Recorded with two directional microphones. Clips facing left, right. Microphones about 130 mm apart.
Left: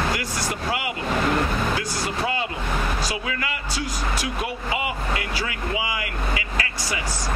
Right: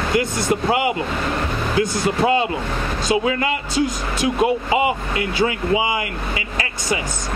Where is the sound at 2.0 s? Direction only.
25° right (ahead or behind).